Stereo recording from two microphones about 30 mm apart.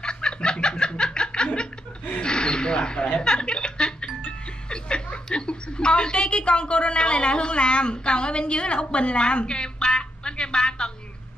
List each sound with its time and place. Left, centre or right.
0.0 s snicker: left
2.2 s a sound: left
3.1 s music: left